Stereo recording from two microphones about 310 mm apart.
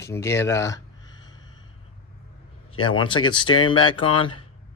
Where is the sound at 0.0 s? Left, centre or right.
Centre.